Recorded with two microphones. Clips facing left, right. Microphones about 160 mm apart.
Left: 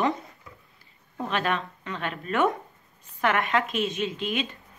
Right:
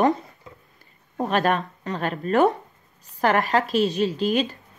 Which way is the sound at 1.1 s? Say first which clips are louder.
Right 6 dB; 45° right (ahead or behind).